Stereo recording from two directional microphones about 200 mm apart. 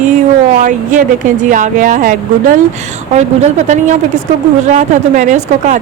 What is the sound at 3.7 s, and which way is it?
A woman's voice, 35° right (ahead or behind).